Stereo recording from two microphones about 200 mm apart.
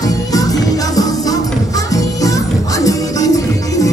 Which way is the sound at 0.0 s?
20° left (ahead or behind).